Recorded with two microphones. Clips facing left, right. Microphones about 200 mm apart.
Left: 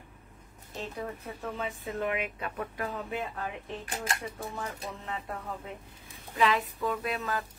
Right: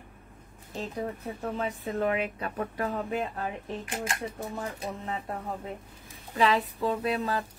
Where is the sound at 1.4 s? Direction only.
40° right (ahead or behind).